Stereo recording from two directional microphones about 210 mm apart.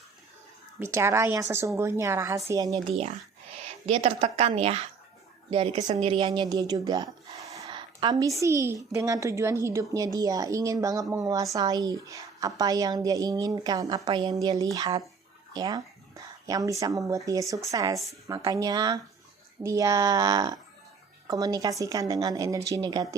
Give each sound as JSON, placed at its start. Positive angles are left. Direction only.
{"t": 0.8, "sound": "a woman's voice", "side_deg": -10}
{"t": 3.7, "sound": "a woman's voice", "side_deg": -30}